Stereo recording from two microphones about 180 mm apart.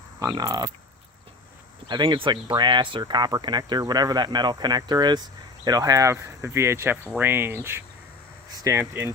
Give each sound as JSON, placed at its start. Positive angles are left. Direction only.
{"t": 0.3, "sound": "speech", "side_deg": -20}
{"t": 1.9, "sound": "speech", "side_deg": -25}